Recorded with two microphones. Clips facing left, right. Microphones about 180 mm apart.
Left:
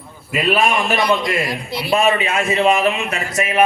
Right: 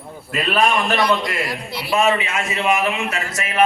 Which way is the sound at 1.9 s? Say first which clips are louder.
Left 1 dB; 35° left (ahead or behind).